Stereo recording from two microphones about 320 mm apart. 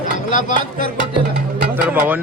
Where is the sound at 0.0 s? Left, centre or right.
Left.